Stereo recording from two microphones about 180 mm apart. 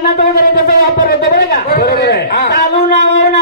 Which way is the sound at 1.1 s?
55° left (ahead or behind).